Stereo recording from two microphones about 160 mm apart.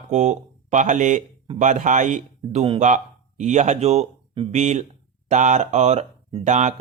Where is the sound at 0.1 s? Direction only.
45° right (ahead or behind).